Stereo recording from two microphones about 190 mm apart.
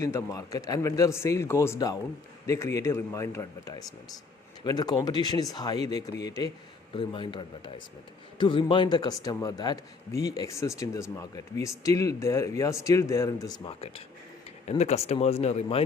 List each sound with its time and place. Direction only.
0.0 s a man's voice: 15° left (ahead or behind)
13.7 s speech: 30° left (ahead or behind)